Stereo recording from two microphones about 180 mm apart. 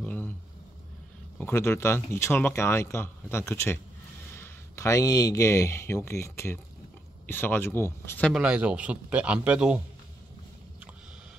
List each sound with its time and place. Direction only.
0.0 s a sound: 10° left (ahead or behind)
1.4 s speech: 15° left (ahead or behind)
8.3 s a man's voice: 5° right (ahead or behind)